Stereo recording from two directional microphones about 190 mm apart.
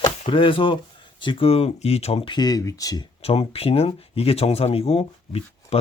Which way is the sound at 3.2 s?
30° left (ahead or behind).